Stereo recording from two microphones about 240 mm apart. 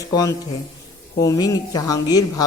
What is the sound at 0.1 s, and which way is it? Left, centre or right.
Speech, centre.